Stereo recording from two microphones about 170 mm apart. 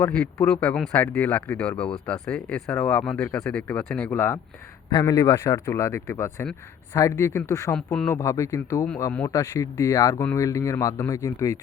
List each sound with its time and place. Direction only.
0.0 s speech: 5° left (ahead or behind)
4.9 s speech: 25° left (ahead or behind)